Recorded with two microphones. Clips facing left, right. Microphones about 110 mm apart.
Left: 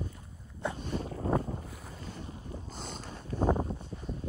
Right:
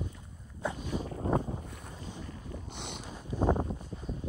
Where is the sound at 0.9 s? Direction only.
5° right (ahead or behind).